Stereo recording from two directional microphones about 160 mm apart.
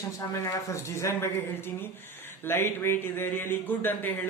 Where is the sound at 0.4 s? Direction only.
20° left (ahead or behind).